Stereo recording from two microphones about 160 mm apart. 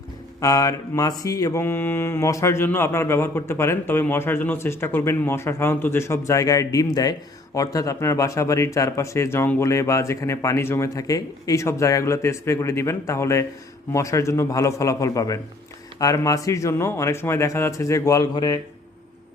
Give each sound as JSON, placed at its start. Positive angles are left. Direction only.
{"t": 0.3, "sound": "mantra", "side_deg": 20}
{"t": 13.9, "sound": "speech", "side_deg": 20}